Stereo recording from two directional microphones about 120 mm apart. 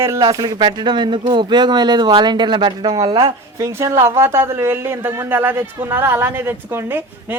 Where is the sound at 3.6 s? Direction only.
20° right (ahead or behind).